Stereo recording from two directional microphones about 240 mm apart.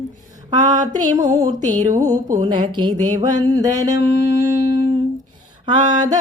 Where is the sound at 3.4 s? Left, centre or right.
Centre.